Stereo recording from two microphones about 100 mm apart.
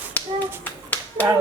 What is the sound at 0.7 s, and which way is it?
Clapping, 15° left (ahead or behind).